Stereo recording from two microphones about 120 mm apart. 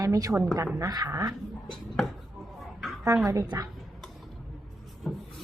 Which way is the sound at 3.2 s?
30° right (ahead or behind).